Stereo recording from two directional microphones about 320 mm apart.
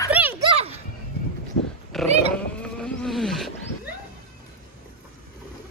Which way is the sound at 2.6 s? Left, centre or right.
Centre.